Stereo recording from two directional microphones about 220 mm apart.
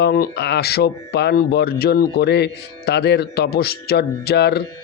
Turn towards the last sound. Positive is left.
turn(degrees=50)  # may be behind; listen again after turning